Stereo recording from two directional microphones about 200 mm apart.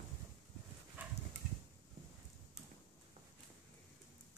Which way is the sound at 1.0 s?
10° right (ahead or behind).